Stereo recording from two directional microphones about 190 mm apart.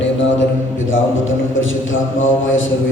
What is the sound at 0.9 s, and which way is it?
A man's voice, 90° left.